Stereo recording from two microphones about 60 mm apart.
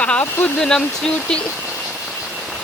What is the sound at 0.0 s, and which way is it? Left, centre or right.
Speech, left.